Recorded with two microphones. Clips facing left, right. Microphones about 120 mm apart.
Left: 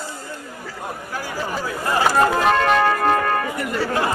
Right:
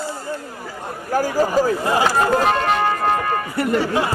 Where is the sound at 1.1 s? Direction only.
40° right (ahead or behind).